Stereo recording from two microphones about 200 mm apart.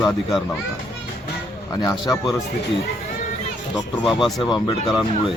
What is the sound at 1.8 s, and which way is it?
Speech, 15° left (ahead or behind).